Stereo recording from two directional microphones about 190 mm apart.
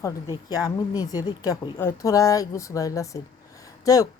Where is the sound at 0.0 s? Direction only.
20° left (ahead or behind).